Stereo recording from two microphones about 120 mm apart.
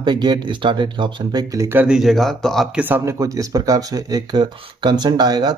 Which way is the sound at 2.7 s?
15° right (ahead or behind).